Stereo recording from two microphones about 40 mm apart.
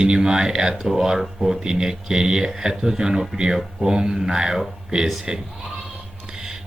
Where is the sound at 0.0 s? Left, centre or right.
Centre.